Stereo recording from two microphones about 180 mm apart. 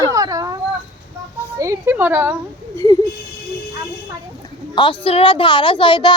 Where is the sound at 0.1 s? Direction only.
20° right (ahead or behind).